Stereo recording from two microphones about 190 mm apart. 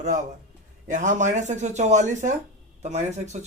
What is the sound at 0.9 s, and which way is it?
Speech, 40° right (ahead or behind).